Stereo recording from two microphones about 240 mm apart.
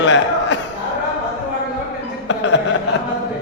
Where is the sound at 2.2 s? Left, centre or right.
Left.